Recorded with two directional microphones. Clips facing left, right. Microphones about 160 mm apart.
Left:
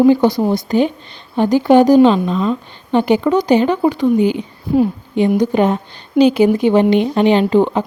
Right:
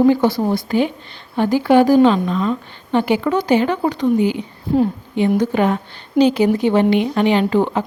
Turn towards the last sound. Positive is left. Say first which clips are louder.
# left 3 dB
turn(degrees=20)  # may be behind; listen again after turning